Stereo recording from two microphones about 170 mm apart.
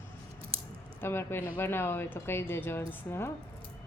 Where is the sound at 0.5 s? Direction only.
35° right (ahead or behind).